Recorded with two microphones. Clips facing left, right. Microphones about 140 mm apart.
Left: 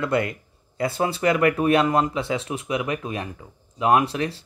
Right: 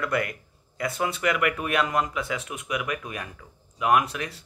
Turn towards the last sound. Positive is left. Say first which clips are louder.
# left 3 dB
turn(degrees=30)  # may be behind; listen again after turning